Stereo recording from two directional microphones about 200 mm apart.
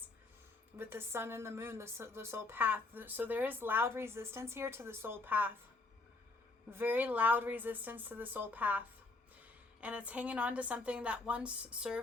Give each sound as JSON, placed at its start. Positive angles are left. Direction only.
{"t": 0.8, "sound": "a woman's voice", "side_deg": -10}
{"t": 6.7, "sound": "a woman's voice", "side_deg": -10}
{"t": 9.8, "sound": "a woman's voice", "side_deg": -5}